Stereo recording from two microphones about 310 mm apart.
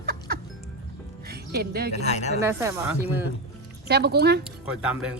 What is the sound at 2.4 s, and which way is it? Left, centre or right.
Speech, centre.